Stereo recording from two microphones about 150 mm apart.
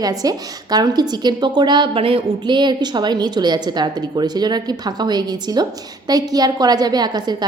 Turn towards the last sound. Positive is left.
turn(degrees=-25)  # may be behind; listen again after turning